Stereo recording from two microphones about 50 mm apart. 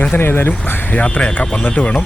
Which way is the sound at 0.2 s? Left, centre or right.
Left.